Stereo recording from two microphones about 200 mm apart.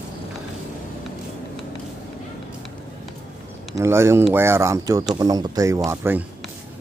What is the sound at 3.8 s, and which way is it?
Speech, 15° right (ahead or behind).